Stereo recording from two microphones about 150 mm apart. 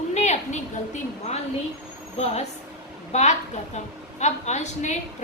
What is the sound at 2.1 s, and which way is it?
A woman's voice, 45° left (ahead or behind).